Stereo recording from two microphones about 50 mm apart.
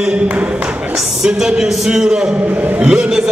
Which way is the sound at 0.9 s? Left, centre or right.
Centre.